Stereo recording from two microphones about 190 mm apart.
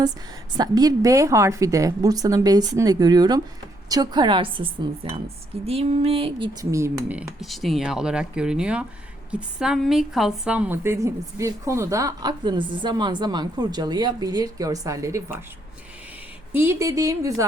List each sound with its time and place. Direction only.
0.5 s a woman's voice: 20° right (ahead or behind)
16.5 s a woman's voice: 10° right (ahead or behind)